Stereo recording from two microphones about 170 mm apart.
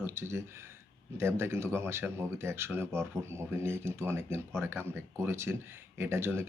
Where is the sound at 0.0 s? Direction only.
15° right (ahead or behind).